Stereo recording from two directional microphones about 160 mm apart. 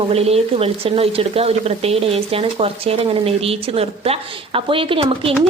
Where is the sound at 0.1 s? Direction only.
40° right (ahead or behind).